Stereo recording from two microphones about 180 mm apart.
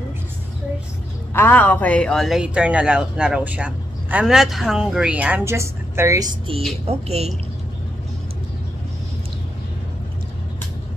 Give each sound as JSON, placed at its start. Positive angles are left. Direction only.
{"t": 1.3, "sound": "speech", "side_deg": 10}
{"t": 6.9, "sound": "a woman's voice", "side_deg": -35}